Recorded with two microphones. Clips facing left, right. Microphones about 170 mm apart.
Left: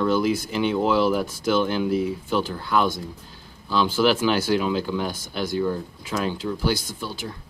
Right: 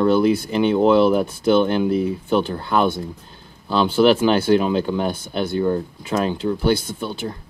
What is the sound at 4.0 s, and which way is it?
Speech, 30° right (ahead or behind).